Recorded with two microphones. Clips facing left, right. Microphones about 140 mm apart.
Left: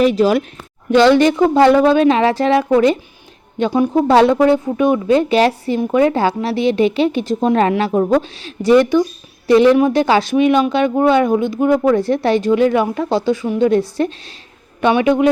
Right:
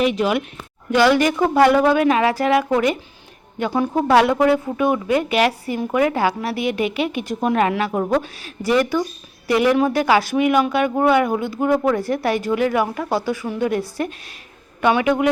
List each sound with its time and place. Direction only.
0.0 s a woman's voice: 35° left (ahead or behind)
0.9 s a woman's voice: 25° left (ahead or behind)
4.1 s speech: 30° left (ahead or behind)